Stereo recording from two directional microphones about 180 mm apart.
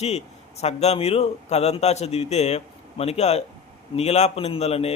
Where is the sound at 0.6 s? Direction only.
35° left (ahead or behind).